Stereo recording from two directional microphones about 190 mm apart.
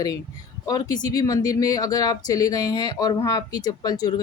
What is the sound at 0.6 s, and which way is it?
Speech, 20° left (ahead or behind).